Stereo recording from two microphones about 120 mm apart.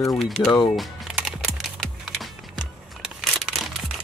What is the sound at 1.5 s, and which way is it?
Typing, centre (ahead or behind).